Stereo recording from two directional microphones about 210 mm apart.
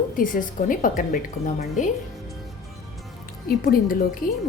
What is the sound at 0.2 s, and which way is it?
A woman's voice, 40° left (ahead or behind).